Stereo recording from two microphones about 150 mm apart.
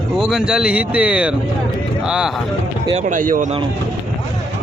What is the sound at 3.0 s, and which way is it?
Speech, 60° right (ahead or behind).